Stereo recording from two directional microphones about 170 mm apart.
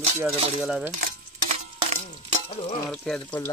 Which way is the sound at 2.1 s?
25° left (ahead or behind).